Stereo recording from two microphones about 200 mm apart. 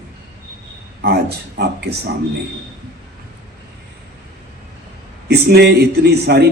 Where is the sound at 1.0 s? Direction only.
55° right (ahead or behind).